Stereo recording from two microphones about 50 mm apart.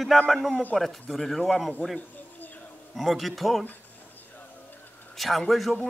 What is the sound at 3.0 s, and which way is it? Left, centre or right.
Speech, centre.